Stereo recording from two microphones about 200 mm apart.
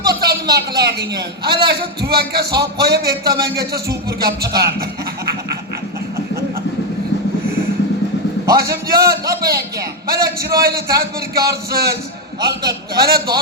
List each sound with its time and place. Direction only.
0.1 s a man's voice: 50° right (ahead or behind)
8.5 s a man's voice: 50° right (ahead or behind)